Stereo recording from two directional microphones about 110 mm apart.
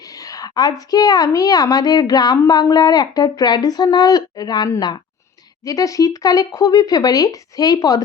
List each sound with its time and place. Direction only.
0.3 s a woman's voice: 35° left (ahead or behind)